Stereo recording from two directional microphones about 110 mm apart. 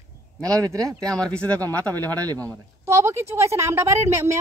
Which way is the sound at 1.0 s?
10° left (ahead or behind).